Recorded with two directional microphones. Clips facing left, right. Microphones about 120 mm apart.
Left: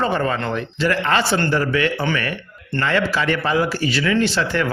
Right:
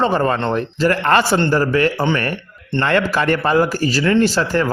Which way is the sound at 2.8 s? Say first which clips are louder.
Right 3 dB; 55° right (ahead or behind).